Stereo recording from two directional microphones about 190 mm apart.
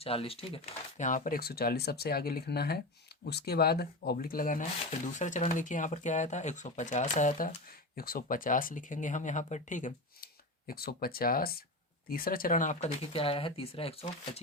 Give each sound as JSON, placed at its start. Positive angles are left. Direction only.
{"t": 0.0, "sound": "speech", "side_deg": 30}
{"t": 10.7, "sound": "speech", "side_deg": 50}
{"t": 13.1, "sound": "speech", "side_deg": 30}